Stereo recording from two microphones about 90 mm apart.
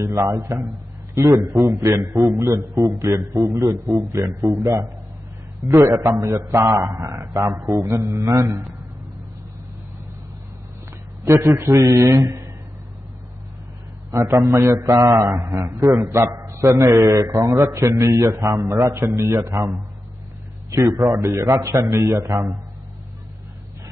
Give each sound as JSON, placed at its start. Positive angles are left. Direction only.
{"t": 0.0, "sound": "a man's voice", "side_deg": -40}
{"t": 11.2, "sound": "a man's voice", "side_deg": -35}
{"t": 14.1, "sound": "a man's voice", "side_deg": -35}
{"t": 20.7, "sound": "a man's voice", "side_deg": -40}